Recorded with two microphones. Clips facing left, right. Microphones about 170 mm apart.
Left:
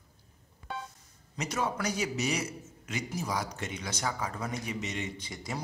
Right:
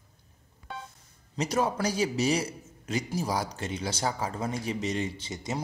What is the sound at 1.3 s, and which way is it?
A man's voice, 35° right (ahead or behind).